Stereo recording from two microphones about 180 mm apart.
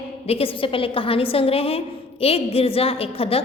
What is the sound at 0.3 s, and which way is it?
A woman's voice, 30° left (ahead or behind).